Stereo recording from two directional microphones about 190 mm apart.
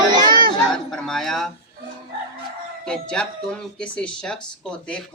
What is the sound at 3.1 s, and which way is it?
Speech, 5° left (ahead or behind).